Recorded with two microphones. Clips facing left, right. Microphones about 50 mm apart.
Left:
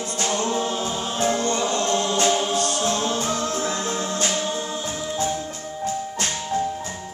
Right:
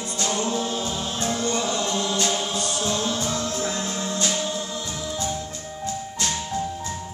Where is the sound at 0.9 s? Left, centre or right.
Centre.